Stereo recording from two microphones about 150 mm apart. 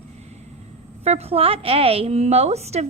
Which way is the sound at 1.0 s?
45° right (ahead or behind).